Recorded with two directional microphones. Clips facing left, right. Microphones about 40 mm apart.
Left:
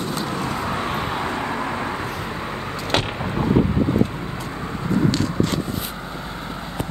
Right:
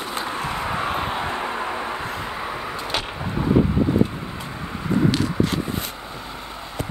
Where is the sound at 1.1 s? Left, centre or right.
Right.